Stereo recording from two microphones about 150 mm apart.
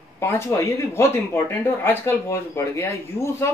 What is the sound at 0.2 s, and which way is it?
Speech, 15° left (ahead or behind).